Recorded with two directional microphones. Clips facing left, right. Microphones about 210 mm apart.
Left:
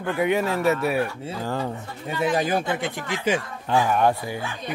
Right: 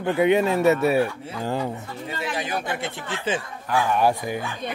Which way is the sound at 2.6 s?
20° left (ahead or behind).